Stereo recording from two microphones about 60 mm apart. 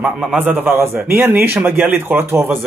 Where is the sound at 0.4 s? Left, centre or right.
Right.